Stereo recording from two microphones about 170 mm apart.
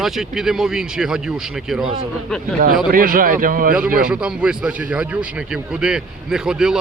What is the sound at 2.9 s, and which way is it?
Speech, 55° right (ahead or behind).